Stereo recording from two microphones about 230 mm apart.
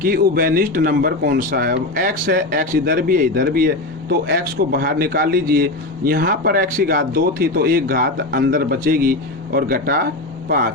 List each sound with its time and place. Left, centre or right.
0.0 s a man's voice: right